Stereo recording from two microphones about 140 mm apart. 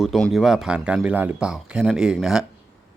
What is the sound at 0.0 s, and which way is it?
Speech, centre (ahead or behind).